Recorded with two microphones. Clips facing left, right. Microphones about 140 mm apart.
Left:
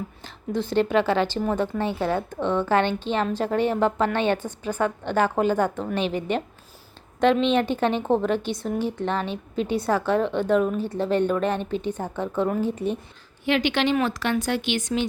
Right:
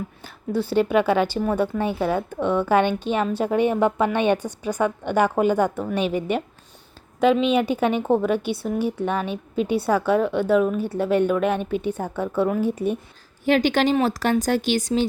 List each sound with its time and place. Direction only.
0.2 s speech: 10° right (ahead or behind)
13.4 s speech: 40° right (ahead or behind)